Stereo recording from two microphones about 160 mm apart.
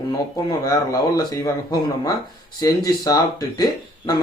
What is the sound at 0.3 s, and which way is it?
Speech, 20° left (ahead or behind).